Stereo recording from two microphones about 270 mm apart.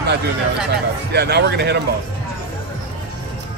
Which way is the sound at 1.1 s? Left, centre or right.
Right.